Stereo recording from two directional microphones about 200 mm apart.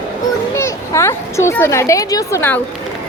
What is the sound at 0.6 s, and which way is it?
Speech, 15° left (ahead or behind).